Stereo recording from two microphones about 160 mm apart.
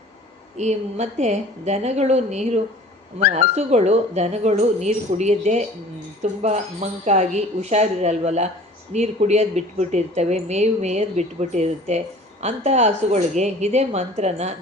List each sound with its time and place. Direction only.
0.5 s speech: 45° right (ahead or behind)